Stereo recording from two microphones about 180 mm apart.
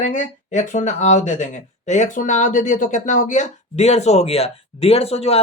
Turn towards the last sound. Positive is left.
turn(degrees=35)  # may be behind; listen again after turning